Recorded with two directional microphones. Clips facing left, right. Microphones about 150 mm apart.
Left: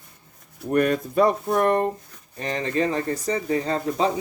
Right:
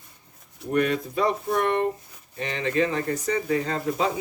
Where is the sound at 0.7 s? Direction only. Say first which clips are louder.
Left 3 dB; 50° left (ahead or behind).